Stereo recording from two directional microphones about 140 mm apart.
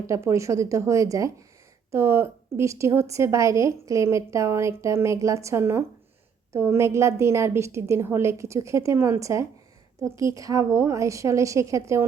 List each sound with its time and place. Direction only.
0.1 s a woman's voice: 20° right (ahead or behind)